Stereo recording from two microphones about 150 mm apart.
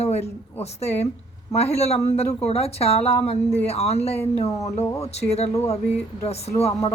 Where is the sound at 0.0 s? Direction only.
45° left (ahead or behind).